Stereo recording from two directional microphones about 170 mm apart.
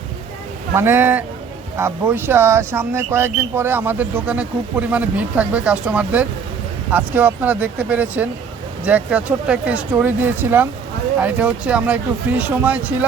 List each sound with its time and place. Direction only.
0.7 s speech: 15° right (ahead or behind)